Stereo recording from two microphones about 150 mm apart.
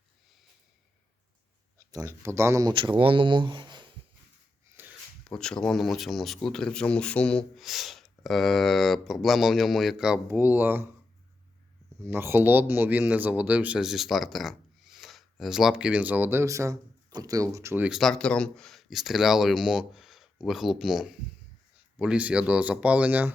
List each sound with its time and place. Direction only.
1.9 s speech: 20° right (ahead or behind)
2.7 s speech: 35° right (ahead or behind)
4.8 s a sound: 15° right (ahead or behind)
5.3 s speech: 5° left (ahead or behind)
10.2 s a man's voice: 15° right (ahead or behind)
12.0 s a man's voice: 15° right (ahead or behind)
17.8 s a man's voice: centre (ahead or behind)